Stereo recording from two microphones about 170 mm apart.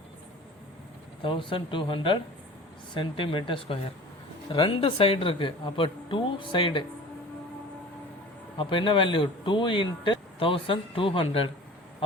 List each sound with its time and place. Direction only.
1.2 s speech: 30° left (ahead or behind)
8.5 s speech: 30° left (ahead or behind)